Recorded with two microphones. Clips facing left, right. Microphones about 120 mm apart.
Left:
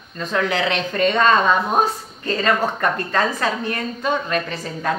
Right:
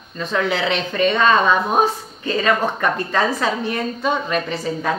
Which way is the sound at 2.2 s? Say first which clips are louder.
Right 1 dB; 10° right (ahead or behind).